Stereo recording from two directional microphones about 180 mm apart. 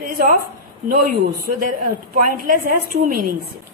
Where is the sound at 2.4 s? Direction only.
50° right (ahead or behind).